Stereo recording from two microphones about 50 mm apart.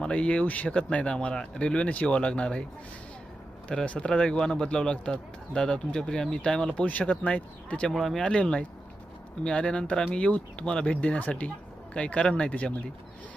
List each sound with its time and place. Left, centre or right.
0.0 s a man's voice: left
3.7 s a man's voice: left
7.9 s speech: centre
8.2 s a man's voice: centre